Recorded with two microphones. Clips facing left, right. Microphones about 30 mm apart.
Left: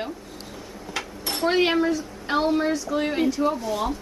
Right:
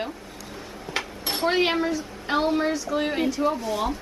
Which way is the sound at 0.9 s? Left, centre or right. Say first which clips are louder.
Right 1 dB; right.